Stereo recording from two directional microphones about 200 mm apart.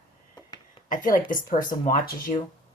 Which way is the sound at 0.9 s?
40° left (ahead or behind).